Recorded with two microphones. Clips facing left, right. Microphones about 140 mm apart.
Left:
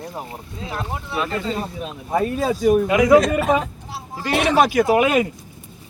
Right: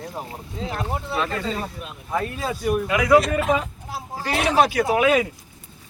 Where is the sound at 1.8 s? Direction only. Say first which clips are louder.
Left 8 dB; 45° left (ahead or behind).